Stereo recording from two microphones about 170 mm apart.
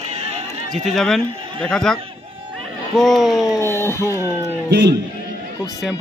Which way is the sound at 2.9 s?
Centre (ahead or behind).